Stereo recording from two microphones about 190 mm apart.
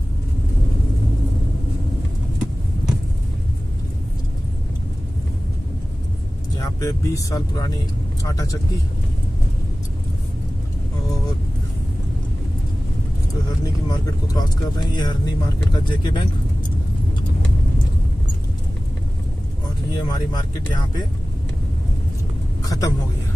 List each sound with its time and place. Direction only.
6.5 s speech: 20° left (ahead or behind)
13.8 s speech: 20° left (ahead or behind)
19.9 s speech: 20° left (ahead or behind)
22.6 s vehicle: 20° left (ahead or behind)